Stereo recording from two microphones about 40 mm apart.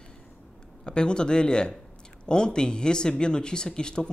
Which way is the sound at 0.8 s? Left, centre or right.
Left.